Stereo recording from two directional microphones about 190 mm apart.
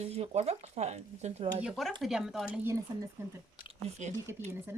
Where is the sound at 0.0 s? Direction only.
35° right (ahead or behind).